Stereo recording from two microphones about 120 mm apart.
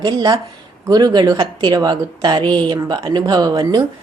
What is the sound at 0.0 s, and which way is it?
Speech, 35° right (ahead or behind).